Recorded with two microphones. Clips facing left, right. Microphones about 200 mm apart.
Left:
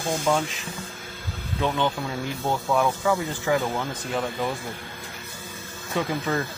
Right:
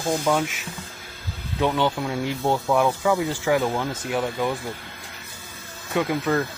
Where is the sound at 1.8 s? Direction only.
20° right (ahead or behind).